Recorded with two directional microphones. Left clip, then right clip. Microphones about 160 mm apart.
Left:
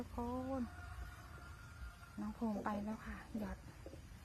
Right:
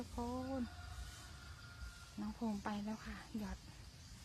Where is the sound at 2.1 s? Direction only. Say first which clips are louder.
Left 2 dB; 5° right (ahead or behind).